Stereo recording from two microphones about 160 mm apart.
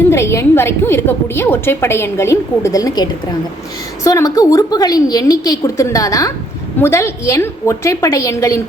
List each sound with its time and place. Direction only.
0.1 s a woman's voice: 15° left (ahead or behind)